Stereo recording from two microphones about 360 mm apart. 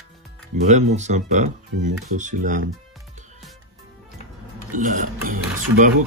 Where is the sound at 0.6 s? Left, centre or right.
Centre.